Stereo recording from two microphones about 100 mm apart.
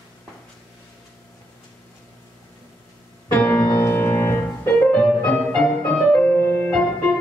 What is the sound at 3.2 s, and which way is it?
Music, 15° left (ahead or behind).